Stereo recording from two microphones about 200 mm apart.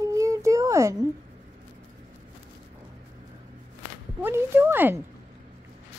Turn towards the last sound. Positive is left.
turn(degrees=-10)  # may be behind; listen again after turning